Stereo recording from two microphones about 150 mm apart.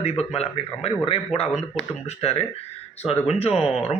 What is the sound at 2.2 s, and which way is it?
A man's voice, 45° left (ahead or behind).